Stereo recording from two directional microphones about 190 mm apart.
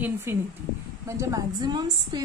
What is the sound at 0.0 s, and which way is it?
A woman's voice, 15° right (ahead or behind).